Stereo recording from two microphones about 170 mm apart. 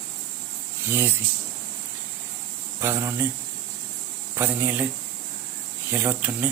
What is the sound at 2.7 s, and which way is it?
Speech, 15° right (ahead or behind).